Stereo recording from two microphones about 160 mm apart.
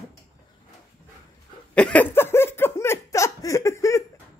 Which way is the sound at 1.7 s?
5° left (ahead or behind).